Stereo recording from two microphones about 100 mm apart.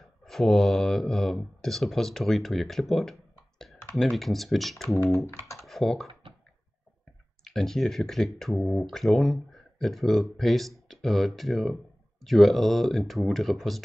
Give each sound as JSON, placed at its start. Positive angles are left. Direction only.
{"t": 0.0, "sound": "speech", "side_deg": 5}
{"t": 7.4, "sound": "speech", "side_deg": 5}